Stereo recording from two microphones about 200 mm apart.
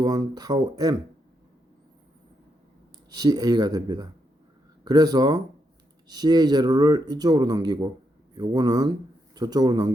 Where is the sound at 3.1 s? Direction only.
20° right (ahead or behind).